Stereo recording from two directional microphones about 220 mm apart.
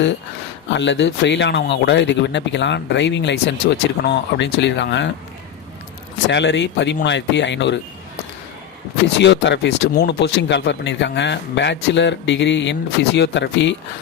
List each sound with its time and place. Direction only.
0.7 s speech: 55° left (ahead or behind)
6.2 s speech: 55° left (ahead or behind)
9.1 s speech: 55° left (ahead or behind)